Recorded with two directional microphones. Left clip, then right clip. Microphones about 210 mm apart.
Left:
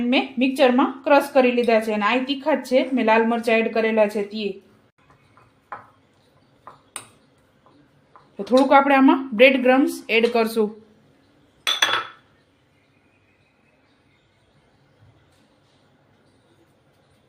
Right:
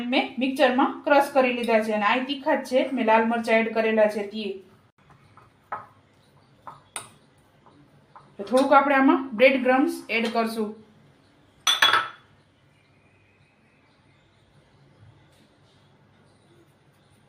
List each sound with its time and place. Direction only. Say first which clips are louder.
0.1 s a woman's voice: left 2 dB; 55° left (ahead or behind)
8.4 s speech: left 3 dB; 55° left (ahead or behind)